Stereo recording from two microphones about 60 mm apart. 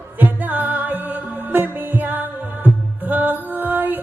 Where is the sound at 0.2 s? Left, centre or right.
Right.